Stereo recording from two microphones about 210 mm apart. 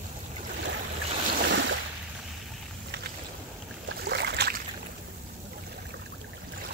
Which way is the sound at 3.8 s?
55° right (ahead or behind).